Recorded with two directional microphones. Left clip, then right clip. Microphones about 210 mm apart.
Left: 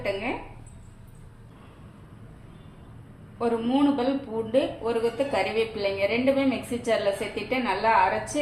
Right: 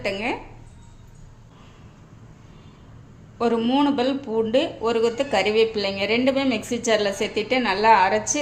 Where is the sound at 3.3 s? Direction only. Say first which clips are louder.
Right 4 dB; 55° right (ahead or behind).